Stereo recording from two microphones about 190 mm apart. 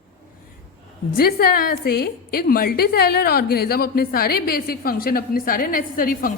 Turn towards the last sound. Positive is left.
turn(degrees=45)  # may be behind; listen again after turning